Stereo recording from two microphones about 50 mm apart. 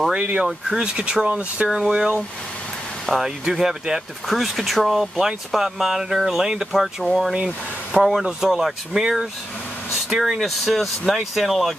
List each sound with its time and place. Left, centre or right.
0.1 s speech: right
0.5 s speech: centre
3.1 s speech: centre